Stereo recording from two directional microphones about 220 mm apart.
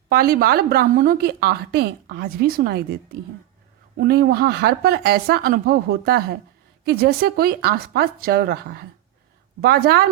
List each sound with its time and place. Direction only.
0.1 s a woman's voice: 45° right (ahead or behind)